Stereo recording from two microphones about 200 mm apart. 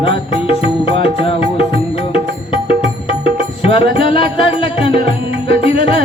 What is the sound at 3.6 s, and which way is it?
Music, 25° left (ahead or behind).